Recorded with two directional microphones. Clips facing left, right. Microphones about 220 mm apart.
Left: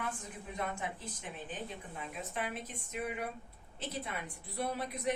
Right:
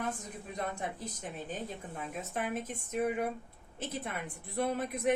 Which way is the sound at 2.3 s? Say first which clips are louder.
Right 5 dB; 45° right (ahead or behind).